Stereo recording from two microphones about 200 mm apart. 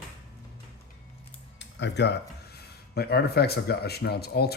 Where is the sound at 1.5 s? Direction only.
60° left (ahead or behind).